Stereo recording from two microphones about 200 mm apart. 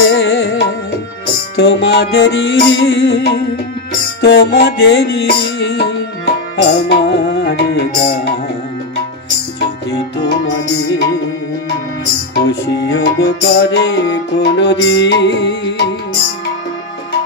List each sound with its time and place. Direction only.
0.0 s music: 65° left (ahead or behind)
1.6 s music: 60° left (ahead or behind)
12.4 s music: 60° left (ahead or behind)